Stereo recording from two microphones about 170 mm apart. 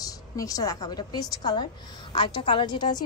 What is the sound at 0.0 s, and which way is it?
A woman's voice, 20° left (ahead or behind).